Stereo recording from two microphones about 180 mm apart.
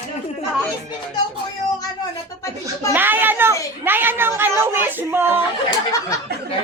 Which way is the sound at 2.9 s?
10° right (ahead or behind).